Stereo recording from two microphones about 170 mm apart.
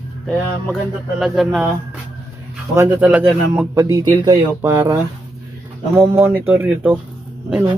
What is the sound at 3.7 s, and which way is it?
Speech, 20° right (ahead or behind).